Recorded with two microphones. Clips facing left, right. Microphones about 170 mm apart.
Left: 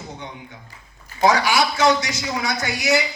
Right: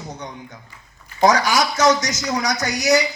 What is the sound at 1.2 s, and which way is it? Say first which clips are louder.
Speech: right 1 dB; 40° right (ahead or behind).